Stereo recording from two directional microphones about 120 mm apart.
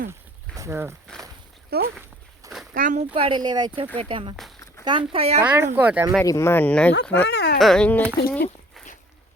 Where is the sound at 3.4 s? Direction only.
35° right (ahead or behind); by 5.3 s 55° right (ahead or behind).